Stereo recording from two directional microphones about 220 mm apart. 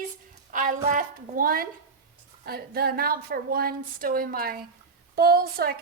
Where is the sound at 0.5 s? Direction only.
35° right (ahead or behind).